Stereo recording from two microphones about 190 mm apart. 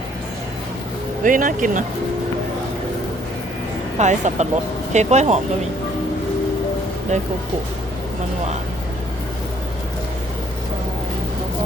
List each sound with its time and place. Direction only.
1.2 s speech: 45° right (ahead or behind)
3.9 s speech: 40° right (ahead or behind)
7.1 s speech: 35° right (ahead or behind)